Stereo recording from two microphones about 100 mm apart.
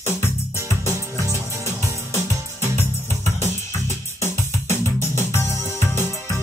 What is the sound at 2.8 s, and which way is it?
Music, 25° left (ahead or behind).